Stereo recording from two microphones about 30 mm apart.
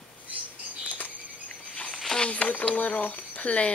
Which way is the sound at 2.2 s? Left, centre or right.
Left.